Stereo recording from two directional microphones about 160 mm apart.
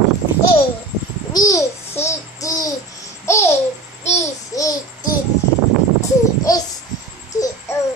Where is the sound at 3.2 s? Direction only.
15° left (ahead or behind).